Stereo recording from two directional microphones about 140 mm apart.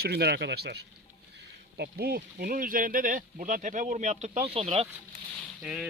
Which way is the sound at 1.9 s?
90° right.